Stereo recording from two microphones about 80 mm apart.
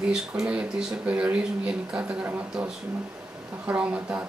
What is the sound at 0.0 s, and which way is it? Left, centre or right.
Speech, centre.